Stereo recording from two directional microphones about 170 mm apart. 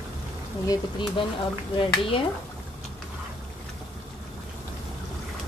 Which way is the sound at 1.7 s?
30° left (ahead or behind).